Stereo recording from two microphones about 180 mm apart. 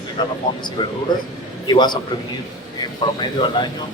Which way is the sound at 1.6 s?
25° left (ahead or behind).